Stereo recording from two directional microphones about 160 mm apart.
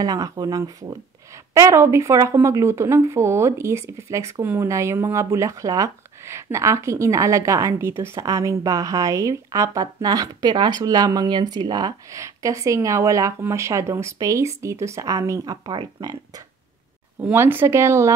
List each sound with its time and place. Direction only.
0.0 s speech: 20° right (ahead or behind)
17.2 s speech: 10° right (ahead or behind)